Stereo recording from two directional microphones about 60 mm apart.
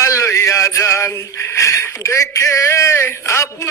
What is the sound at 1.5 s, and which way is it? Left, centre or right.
Speech, left.